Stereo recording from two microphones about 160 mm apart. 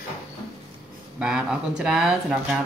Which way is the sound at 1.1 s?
5° right (ahead or behind).